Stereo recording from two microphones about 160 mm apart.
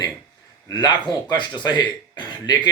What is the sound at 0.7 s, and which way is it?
Speech, 25° left (ahead or behind).